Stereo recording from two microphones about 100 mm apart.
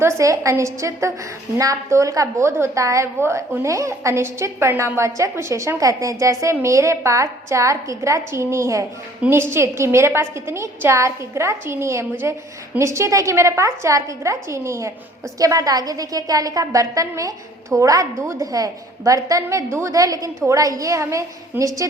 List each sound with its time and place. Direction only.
0.0 s a woman's voice: 30° right (ahead or behind)